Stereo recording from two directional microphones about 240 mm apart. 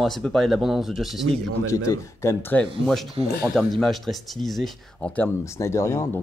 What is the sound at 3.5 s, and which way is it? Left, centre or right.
Speech, centre.